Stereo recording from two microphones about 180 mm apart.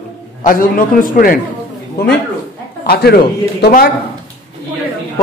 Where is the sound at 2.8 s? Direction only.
60° left (ahead or behind).